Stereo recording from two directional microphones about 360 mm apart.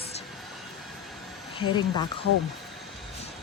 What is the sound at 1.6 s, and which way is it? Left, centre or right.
Speech, centre.